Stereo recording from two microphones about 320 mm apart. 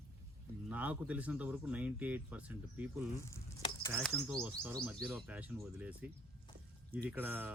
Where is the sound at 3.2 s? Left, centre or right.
Centre.